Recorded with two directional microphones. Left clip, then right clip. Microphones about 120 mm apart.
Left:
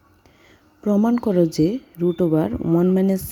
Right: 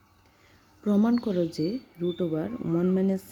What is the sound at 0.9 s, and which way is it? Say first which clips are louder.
Speech: left 6 dB; 20° left (ahead or behind).